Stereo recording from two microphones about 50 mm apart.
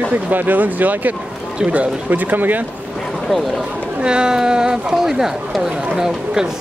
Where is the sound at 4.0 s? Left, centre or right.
Centre.